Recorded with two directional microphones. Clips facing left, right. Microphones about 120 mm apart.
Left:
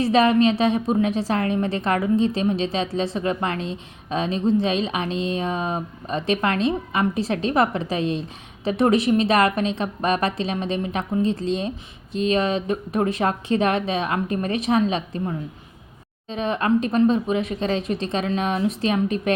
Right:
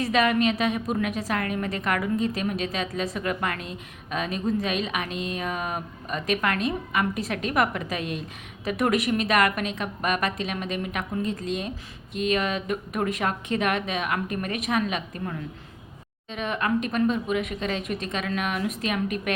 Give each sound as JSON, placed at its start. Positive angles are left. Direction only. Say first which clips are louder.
{"t": 0.0, "sound": "a woman's voice", "louder": "left 5 dB", "side_deg": 30}